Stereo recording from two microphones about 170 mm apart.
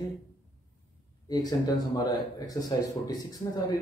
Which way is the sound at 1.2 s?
20° left (ahead or behind).